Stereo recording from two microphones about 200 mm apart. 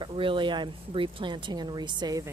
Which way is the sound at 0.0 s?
25° right (ahead or behind).